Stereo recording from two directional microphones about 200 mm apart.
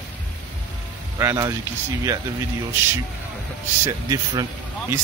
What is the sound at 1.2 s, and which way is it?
Speech, 15° right (ahead or behind).